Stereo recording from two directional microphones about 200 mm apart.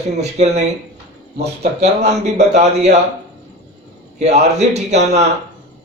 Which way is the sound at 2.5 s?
35° right (ahead or behind).